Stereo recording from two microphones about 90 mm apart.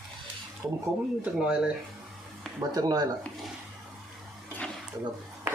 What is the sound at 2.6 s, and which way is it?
Speech, 45° right (ahead or behind).